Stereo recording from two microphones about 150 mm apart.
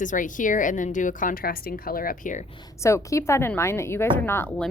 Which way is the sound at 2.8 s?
20° left (ahead or behind).